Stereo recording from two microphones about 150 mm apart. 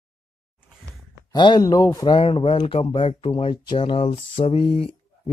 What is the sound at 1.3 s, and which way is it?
Speech, 30° left (ahead or behind).